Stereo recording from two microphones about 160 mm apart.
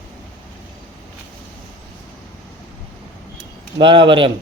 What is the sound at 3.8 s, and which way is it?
Speech, 30° right (ahead or behind).